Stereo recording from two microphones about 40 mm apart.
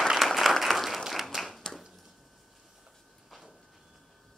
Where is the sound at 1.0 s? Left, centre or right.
Centre.